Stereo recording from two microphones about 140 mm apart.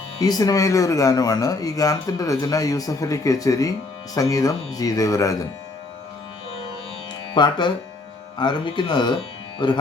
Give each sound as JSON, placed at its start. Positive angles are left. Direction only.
{"t": 0.2, "sound": "speech", "side_deg": 25}
{"t": 7.3, "sound": "speech", "side_deg": 30}